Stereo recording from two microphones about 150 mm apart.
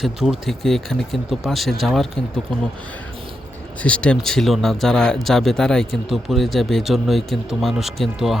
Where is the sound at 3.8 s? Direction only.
5° left (ahead or behind).